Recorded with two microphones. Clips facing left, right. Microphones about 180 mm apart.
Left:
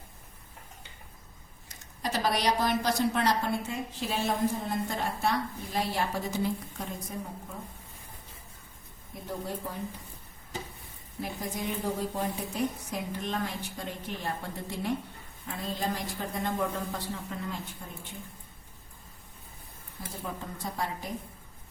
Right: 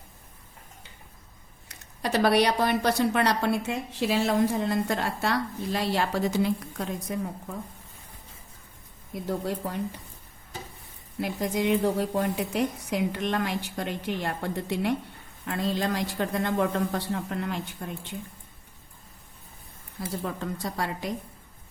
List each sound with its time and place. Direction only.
1.6 s speech: 70° right (ahead or behind)
9.1 s a woman's voice: 80° right
11.2 s speech: 75° right (ahead or behind)
20.0 s a woman's voice: 85° right